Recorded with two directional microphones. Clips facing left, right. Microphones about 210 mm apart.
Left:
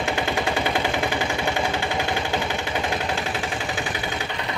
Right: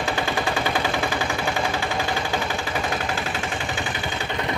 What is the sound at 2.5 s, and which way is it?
Machine gun, 20° left (ahead or behind).